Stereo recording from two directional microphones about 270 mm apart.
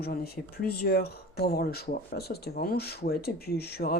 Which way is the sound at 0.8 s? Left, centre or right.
Left.